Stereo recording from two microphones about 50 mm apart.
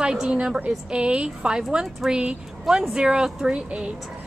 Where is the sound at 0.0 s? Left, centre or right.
Centre.